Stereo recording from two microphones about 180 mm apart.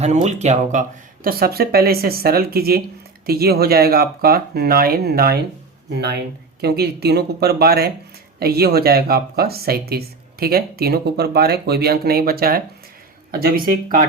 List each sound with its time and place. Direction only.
0.0 s speech: 40° right (ahead or behind); by 14.0 s 55° right (ahead or behind)